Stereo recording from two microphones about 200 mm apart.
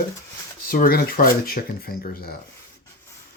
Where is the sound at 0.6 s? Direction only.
50° left (ahead or behind).